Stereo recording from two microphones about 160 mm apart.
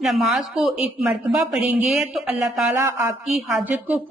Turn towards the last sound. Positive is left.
turn(degrees=-5)  # may be behind; listen again after turning